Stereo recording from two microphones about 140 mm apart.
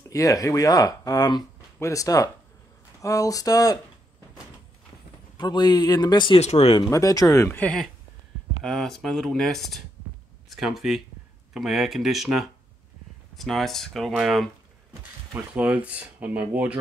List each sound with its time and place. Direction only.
0.0 s speech: 25° left (ahead or behind)
5.4 s speech: 30° left (ahead or behind)
6.4 s speech: 50° left (ahead or behind)
6.9 s speech: 25° left (ahead or behind); by 14.5 s centre (ahead or behind)
15.5 s speech: 10° right (ahead or behind)